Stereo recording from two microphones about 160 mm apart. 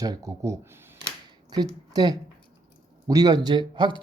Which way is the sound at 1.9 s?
25° right (ahead or behind).